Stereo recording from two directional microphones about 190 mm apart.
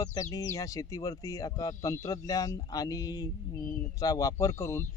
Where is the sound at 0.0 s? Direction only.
20° left (ahead or behind).